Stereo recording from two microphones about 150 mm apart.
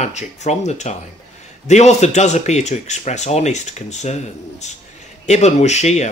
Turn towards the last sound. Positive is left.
turn(degrees=50)  # may be behind; listen again after turning